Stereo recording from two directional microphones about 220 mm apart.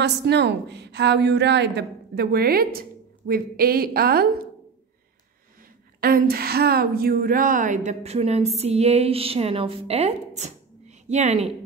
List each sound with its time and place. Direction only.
0.0 s a woman's voice: 50° right (ahead or behind)
5.9 s a woman's voice: 40° right (ahead or behind)